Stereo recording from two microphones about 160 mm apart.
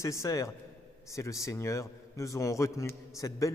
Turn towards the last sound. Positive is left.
turn(degrees=20)  # may be behind; listen again after turning